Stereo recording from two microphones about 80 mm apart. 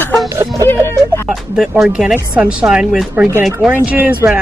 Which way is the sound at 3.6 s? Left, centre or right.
Centre.